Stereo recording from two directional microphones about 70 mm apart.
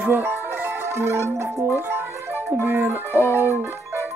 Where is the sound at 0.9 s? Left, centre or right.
Right.